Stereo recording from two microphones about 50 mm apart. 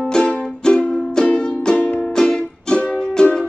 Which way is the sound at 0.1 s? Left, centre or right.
Centre.